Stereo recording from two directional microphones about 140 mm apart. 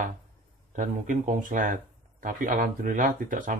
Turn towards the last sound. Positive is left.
turn(degrees=-75)  # may be behind; listen again after turning